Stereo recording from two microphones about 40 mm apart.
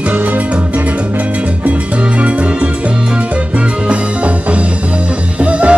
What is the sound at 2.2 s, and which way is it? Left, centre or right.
Music, right.